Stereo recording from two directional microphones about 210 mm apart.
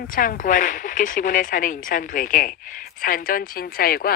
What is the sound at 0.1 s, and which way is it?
Speech, 40° left (ahead or behind).